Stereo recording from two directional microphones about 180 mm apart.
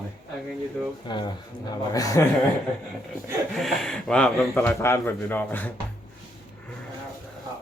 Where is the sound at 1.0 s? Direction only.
25° left (ahead or behind).